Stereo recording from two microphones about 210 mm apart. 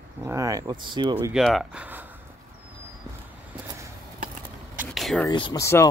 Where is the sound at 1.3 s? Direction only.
Centre (ahead or behind).